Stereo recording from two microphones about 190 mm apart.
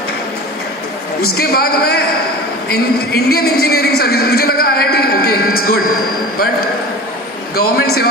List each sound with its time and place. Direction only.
1.2 s a man's voice: 55° left (ahead or behind)
7.5 s a man's voice: 55° left (ahead or behind)